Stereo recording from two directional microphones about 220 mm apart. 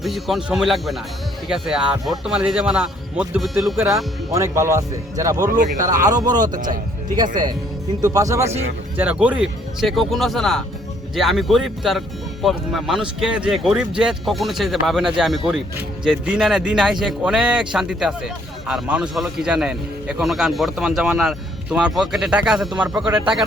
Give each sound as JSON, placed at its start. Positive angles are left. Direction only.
{"t": 0.0, "sound": "speech", "side_deg": 0}
{"t": 3.8, "sound": "speech", "side_deg": -15}